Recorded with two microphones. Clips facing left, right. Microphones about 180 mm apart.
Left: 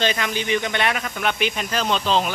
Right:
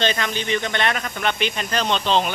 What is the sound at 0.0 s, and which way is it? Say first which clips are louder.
Speech: even; 10° left (ahead or behind).